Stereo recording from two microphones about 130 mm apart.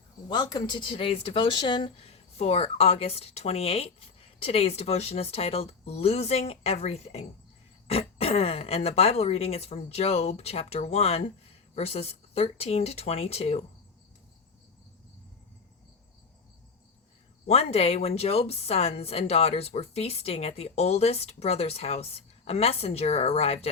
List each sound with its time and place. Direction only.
0.3 s speech: 30° left (ahead or behind); by 13.7 s 50° left (ahead or behind)
17.4 s speech: 50° left (ahead or behind)